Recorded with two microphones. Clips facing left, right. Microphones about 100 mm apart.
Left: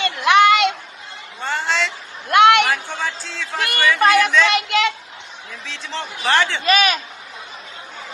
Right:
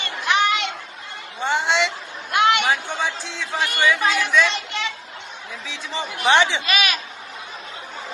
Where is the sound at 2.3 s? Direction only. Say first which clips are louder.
Left 6 dB; 70° left (ahead or behind).